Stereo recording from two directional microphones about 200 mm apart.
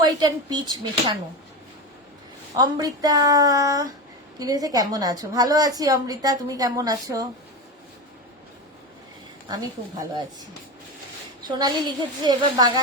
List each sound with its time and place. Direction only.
0.0 s a woman's voice: 20° right (ahead or behind)
2.6 s a woman's voice: 20° right (ahead or behind)
9.5 s a woman's voice: 20° right (ahead or behind)
11.4 s a woman's voice: 20° right (ahead or behind)